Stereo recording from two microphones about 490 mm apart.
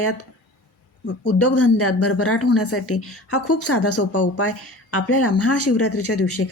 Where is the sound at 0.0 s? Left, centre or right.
Left.